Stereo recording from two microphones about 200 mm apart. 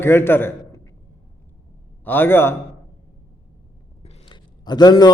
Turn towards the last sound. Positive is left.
turn(degrees=20)  # may be behind; listen again after turning